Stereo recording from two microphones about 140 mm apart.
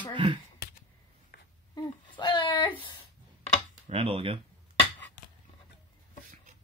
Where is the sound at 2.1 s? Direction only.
35° left (ahead or behind).